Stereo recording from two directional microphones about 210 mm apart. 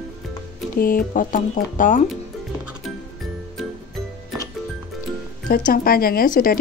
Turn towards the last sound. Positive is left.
turn(degrees=40)  # may be behind; listen again after turning